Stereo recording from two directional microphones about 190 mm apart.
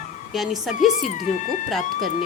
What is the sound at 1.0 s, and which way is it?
Speech, 40° left (ahead or behind).